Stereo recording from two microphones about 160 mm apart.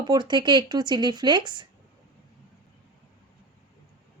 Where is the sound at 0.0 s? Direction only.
25° right (ahead or behind).